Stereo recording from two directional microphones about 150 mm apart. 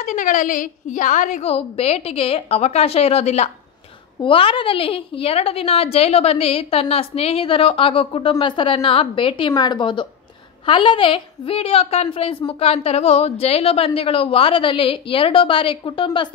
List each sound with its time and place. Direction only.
0.0 s a woman's voice: 55° left (ahead or behind); by 16.3 s 35° left (ahead or behind)